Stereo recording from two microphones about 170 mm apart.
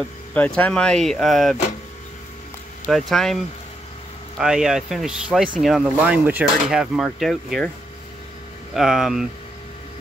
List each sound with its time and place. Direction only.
0.6 s speech: 5° left (ahead or behind)
2.9 s speech: centre (ahead or behind)
4.4 s speech: 5° right (ahead or behind)
8.7 s speech: centre (ahead or behind)